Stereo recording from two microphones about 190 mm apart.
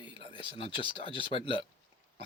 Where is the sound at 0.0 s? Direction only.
25° left (ahead or behind).